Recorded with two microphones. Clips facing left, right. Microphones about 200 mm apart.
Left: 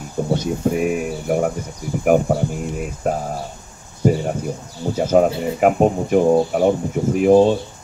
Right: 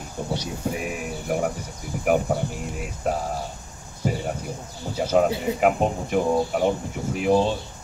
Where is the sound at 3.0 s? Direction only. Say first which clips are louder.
Left 4 dB; 50° left (ahead or behind).